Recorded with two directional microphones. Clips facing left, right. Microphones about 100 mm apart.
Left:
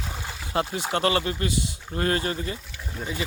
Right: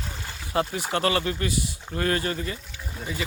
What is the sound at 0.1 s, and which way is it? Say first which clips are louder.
Pour: left 3 dB; 5° left (ahead or behind).